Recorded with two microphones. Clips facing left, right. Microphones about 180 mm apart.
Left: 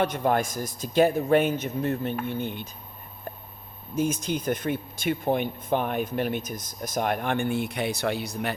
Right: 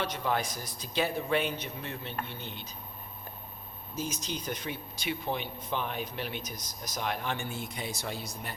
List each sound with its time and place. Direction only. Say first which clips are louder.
0.0 s speech: left 7 dB; 50° left (ahead or behind)
3.9 s speech: left 10 dB; 55° left (ahead or behind); by 8.5 s 70° left (ahead or behind)